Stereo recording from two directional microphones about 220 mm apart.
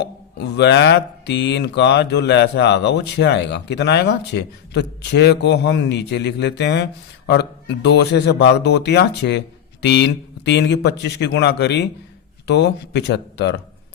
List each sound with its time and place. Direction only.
0.0 s speech: 50° left (ahead or behind)